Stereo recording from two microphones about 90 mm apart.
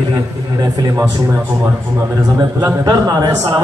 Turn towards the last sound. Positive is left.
turn(degrees=-50)  # may be behind; listen again after turning